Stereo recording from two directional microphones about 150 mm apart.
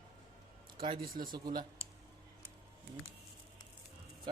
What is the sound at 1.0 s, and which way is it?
Speech, 70° right (ahead or behind).